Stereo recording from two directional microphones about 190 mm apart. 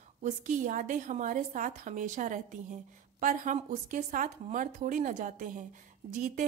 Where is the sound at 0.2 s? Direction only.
40° right (ahead or behind).